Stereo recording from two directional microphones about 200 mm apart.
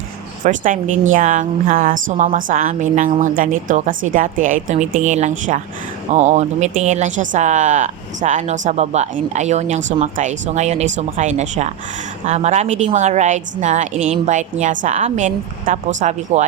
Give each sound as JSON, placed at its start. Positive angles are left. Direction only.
{"t": 0.4, "sound": "speech", "side_deg": -40}